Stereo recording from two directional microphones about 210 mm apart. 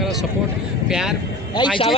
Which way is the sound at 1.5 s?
25° left (ahead or behind).